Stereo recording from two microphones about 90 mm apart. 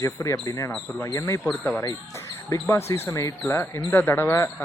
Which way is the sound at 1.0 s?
35° left (ahead or behind).